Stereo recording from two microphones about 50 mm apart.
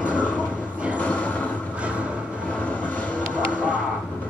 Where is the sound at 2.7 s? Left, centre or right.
Left.